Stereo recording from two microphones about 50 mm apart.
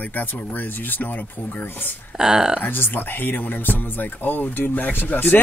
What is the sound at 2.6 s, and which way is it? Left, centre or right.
Speech, left.